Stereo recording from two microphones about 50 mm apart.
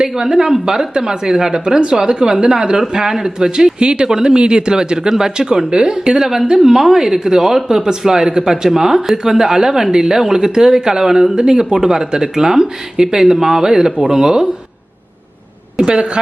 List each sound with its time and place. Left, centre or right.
0.0 s speech: centre
15.8 s a woman's voice: centre